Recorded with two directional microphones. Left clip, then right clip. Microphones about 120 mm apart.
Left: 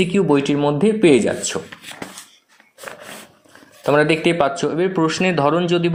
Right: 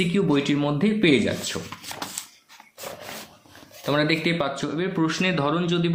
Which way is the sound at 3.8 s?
50° left (ahead or behind).